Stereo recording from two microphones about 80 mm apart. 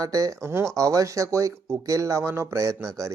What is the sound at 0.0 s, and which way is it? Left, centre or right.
Speech, right.